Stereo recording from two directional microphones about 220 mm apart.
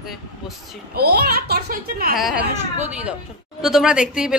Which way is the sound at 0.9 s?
45° right (ahead or behind).